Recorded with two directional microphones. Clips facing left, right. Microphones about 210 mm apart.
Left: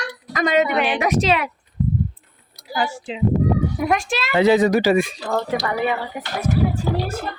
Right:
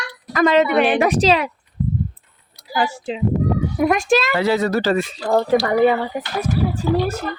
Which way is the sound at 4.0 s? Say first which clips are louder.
Right 9 dB; 45° right (ahead or behind).